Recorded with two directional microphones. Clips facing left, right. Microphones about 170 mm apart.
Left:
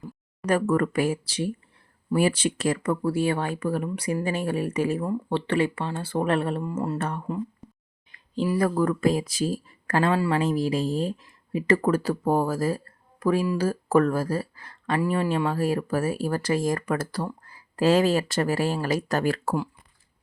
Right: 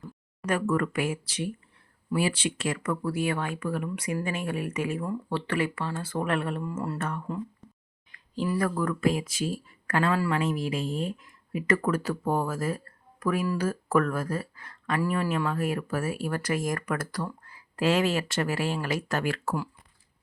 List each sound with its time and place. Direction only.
0.4 s speech: 40° left (ahead or behind)
2.1 s speech: 45° left (ahead or behind); by 7.4 s 15° left (ahead or behind)
8.5 s speech: 30° left (ahead or behind)